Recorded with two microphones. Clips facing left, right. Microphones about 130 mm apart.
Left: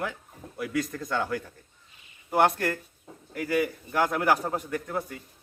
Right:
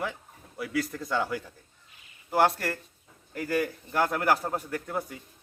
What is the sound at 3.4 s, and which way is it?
A man's voice, 10° left (ahead or behind).